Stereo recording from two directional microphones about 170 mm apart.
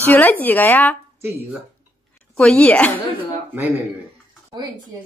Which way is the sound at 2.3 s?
5° left (ahead or behind).